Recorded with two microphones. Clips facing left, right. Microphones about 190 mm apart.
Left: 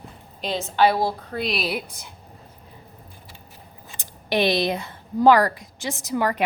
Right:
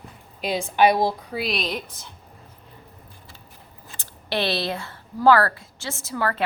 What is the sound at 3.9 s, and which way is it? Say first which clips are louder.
A woman's voice: left 4 dB; 15° left (ahead or behind).